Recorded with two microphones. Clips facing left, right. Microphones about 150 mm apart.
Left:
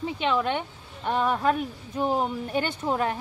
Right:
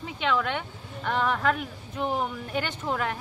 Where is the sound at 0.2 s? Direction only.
25° left (ahead or behind).